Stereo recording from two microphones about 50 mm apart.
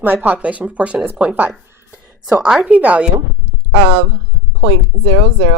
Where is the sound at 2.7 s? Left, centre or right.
Right.